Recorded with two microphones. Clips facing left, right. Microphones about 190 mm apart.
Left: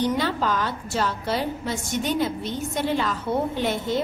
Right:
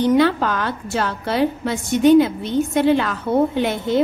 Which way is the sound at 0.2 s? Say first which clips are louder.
Right 7 dB; 60° right (ahead or behind).